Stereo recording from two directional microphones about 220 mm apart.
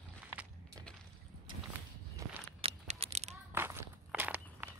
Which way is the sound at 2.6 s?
30° right (ahead or behind).